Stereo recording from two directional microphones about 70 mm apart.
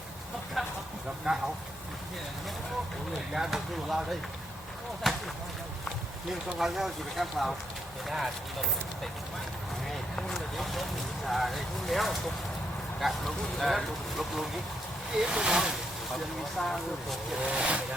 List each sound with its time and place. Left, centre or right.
0.6 s a sound: centre
1.3 s speech: centre
3.3 s speech: centre
6.6 s speech: centre
10.2 s speech: centre
16.6 s speech: centre
17.4 s speech: centre